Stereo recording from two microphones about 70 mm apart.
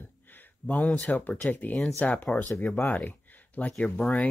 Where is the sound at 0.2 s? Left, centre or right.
Left.